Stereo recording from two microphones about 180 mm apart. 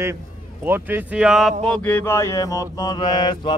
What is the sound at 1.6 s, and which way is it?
Mantra, 5° left (ahead or behind).